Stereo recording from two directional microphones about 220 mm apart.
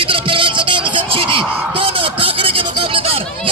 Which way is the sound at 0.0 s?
25° right (ahead or behind).